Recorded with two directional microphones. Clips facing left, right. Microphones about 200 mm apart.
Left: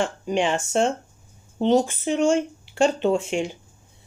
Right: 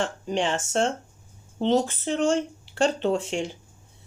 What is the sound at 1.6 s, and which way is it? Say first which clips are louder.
Speech: left 3 dB; 15° left (ahead or behind).